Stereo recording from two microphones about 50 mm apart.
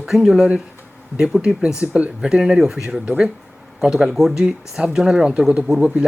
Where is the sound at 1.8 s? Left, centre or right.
Right.